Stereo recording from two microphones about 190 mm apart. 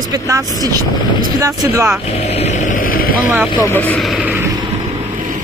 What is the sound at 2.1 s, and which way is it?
Speech, 35° left (ahead or behind).